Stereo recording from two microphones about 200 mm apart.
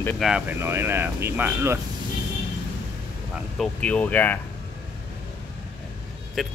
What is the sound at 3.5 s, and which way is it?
Speech, 5° left (ahead or behind).